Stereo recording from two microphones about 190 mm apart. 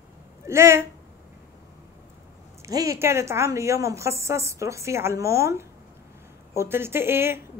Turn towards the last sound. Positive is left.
turn(degrees=-10)  # may be behind; listen again after turning